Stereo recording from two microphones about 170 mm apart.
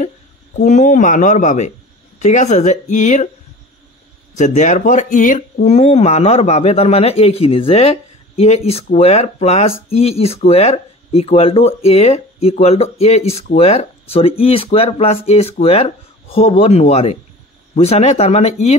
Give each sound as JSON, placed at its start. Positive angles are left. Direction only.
{"t": 0.6, "sound": "speech", "side_deg": 45}
{"t": 4.4, "sound": "speech", "side_deg": 45}